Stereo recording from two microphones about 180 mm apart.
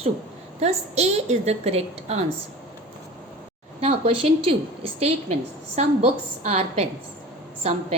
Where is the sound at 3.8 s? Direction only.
35° right (ahead or behind).